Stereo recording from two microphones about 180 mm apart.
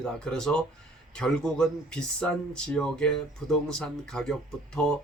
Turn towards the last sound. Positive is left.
turn(degrees=5)  # may be behind; listen again after turning